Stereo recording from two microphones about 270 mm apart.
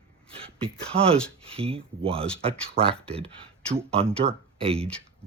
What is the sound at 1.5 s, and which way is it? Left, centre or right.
Speech, right.